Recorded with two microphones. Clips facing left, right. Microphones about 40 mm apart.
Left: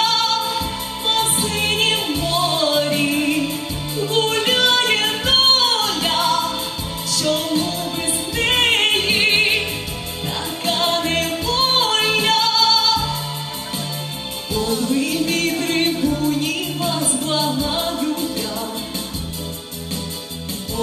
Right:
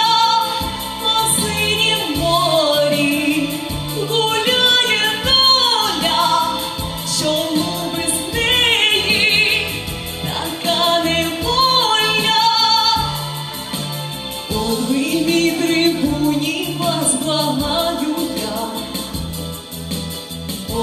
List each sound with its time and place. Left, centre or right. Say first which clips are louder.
0.0 s music: right 5 dB; right
2.2 s music: right 6 dB; right
2.8 s music: right 3 dB; centre
3.3 s music: right 2 dB; right
4.1 s music: right 2 dB; centre
5.0 s music: right 2 dB; right
10.7 s music: right 3 dB; right
14.7 s music: right 2 dB; right